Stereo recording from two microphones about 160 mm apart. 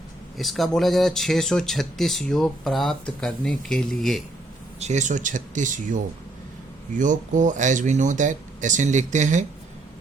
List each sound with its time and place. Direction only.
0.3 s speech: centre (ahead or behind)
4.8 s speech: 45° right (ahead or behind)